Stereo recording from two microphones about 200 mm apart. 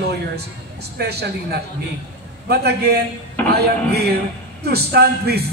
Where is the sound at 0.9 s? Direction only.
55° right (ahead or behind).